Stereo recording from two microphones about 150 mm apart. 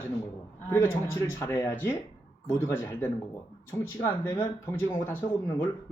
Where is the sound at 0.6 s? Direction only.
15° left (ahead or behind).